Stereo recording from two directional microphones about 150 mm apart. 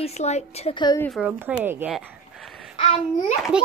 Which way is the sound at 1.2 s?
15° right (ahead or behind).